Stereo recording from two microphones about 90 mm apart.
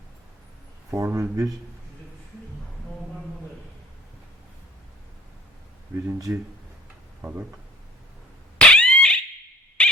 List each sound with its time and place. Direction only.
0.9 s speech: 30° right (ahead or behind)
6.1 s speech: 35° right (ahead or behind)
7.2 s speech: 20° right (ahead or behind)
8.5 s a sound: 10° left (ahead or behind)
9.8 s dog: 10° left (ahead or behind)